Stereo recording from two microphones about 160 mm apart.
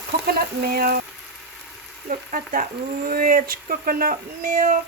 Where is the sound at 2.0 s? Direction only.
60° right (ahead or behind).